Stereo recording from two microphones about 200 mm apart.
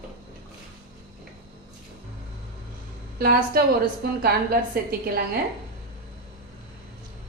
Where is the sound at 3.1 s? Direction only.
50° right (ahead or behind).